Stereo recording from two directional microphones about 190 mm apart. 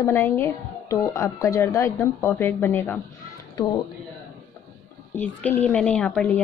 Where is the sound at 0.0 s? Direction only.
15° left (ahead or behind).